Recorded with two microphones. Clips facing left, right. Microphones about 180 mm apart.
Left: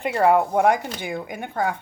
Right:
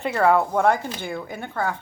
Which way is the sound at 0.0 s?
15° left (ahead or behind).